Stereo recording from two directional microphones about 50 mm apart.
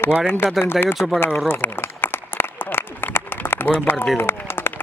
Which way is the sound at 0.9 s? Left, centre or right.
Centre.